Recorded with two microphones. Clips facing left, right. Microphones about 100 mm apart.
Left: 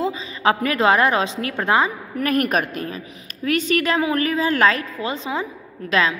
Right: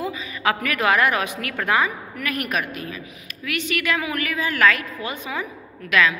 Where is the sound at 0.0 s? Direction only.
25° left (ahead or behind).